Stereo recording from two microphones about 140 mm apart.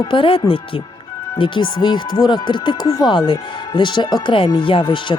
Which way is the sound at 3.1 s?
35° left (ahead or behind).